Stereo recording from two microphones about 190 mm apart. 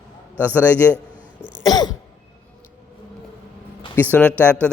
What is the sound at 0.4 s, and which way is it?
Speech, 10° left (ahead or behind).